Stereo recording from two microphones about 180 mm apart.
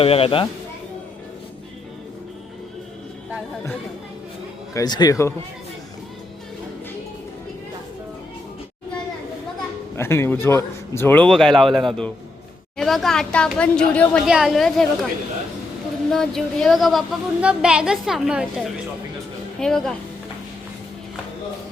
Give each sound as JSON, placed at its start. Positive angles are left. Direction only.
{"t": 0.0, "sound": "speech", "side_deg": 30}
{"t": 3.2, "sound": "music", "side_deg": -5}
{"t": 4.7, "sound": "speech", "side_deg": 20}
{"t": 10.0, "sound": "a man's voice", "side_deg": 15}
{"t": 16.0, "sound": "a woman's voice", "side_deg": 5}
{"t": 19.5, "sound": "a woman's voice", "side_deg": 5}